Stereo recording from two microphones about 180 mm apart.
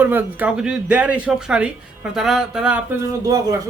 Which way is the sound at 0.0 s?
10° right (ahead or behind).